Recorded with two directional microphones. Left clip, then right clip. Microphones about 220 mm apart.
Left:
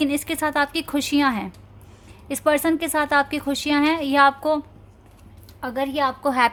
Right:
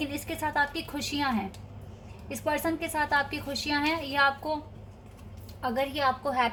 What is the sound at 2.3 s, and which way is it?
A woman's voice, 50° left (ahead or behind).